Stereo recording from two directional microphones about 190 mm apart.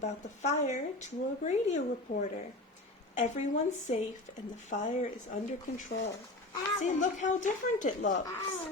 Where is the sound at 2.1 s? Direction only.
35° left (ahead or behind).